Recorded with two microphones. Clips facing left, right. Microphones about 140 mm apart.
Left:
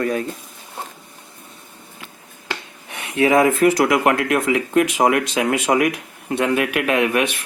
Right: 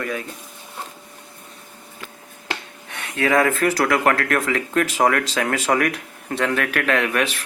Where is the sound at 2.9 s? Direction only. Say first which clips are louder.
Left 4 dB; 20° left (ahead or behind).